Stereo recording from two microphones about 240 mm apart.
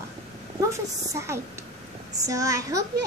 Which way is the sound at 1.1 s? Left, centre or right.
Centre.